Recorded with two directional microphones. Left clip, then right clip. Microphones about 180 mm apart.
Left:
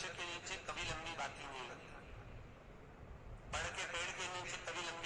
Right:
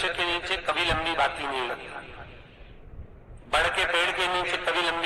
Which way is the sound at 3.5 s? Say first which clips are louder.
Right 19 dB; 50° right (ahead or behind).